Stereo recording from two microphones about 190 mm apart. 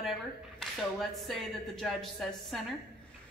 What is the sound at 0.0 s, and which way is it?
Speech, centre (ahead or behind).